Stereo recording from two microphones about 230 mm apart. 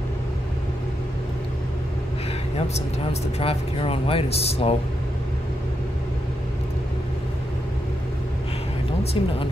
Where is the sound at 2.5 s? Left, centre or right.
Left.